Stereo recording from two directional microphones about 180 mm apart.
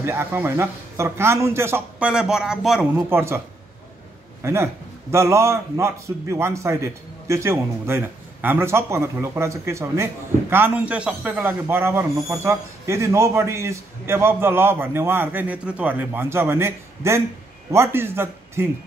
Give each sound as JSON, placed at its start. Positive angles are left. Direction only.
{"t": 0.0, "sound": "a man's voice", "side_deg": -15}